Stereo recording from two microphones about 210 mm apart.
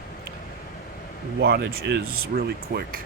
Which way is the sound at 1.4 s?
50° right (ahead or behind).